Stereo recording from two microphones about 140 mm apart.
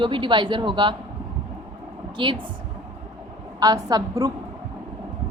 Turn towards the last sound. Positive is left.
turn(degrees=-25)  # may be behind; listen again after turning